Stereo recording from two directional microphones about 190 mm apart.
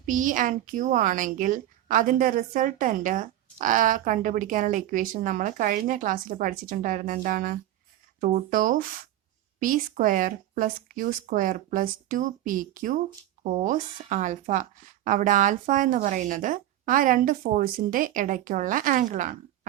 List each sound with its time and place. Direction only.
0.0 s speech: 45° right (ahead or behind)